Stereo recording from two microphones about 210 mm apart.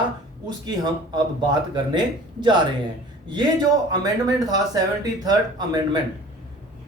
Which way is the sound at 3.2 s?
20° right (ahead or behind).